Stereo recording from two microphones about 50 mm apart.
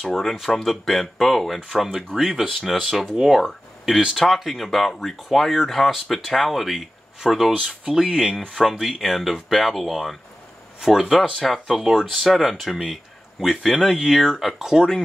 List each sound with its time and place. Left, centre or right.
0.1 s speech: centre
2.8 s speech: centre
7.5 s speech: centre
11.6 s speech: centre
11.9 s speech: centre